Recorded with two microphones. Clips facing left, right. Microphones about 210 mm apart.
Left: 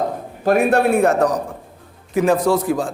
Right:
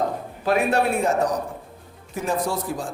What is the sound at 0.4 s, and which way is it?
Speech, 50° left (ahead or behind).